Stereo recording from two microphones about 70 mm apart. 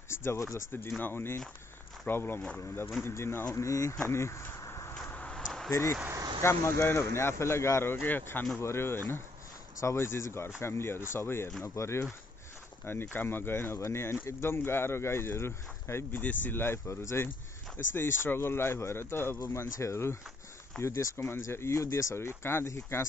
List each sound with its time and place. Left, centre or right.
0.1 s speech: left
0.7 s speech: left
4.0 s a sound: left
5.3 s a sound: centre
6.4 s speech: left
16.2 s speech: left